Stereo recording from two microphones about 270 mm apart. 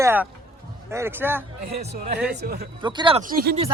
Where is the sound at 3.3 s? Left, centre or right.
Right.